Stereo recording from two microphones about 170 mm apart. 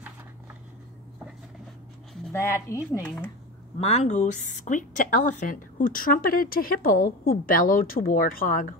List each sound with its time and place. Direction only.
2.3 s speech: 15° left (ahead or behind)
3.8 s a woman's voice: 40° left (ahead or behind); by 8.7 s 55° left (ahead or behind)